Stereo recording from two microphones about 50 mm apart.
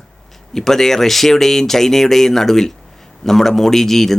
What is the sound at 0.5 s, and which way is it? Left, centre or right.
Speech, centre.